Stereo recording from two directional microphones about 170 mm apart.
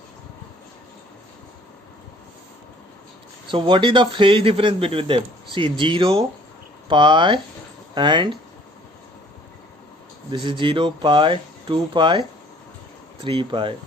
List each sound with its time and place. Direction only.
3.5 s a man's voice: 30° right (ahead or behind)
10.3 s speech: 30° right (ahead or behind)
13.2 s speech: 30° right (ahead or behind)